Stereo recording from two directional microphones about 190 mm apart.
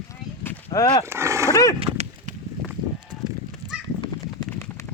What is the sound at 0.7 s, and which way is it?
Speech, 25° left (ahead or behind).